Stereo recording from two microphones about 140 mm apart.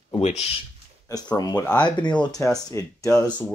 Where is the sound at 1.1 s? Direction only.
25° left (ahead or behind).